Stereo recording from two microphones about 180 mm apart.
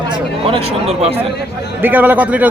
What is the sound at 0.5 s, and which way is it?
Speech, 35° right (ahead or behind).